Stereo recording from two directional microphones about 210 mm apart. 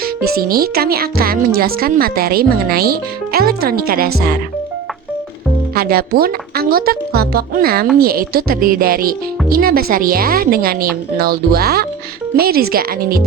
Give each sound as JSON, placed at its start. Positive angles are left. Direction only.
{"t": 0.0, "sound": "speech", "side_deg": -45}
{"t": 5.7, "sound": "speech", "side_deg": -45}